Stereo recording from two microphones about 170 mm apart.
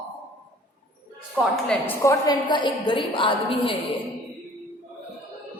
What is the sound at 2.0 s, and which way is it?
A woman's voice, 20° left (ahead or behind).